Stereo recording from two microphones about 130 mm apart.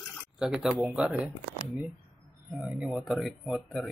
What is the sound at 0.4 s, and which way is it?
Speech, centre (ahead or behind).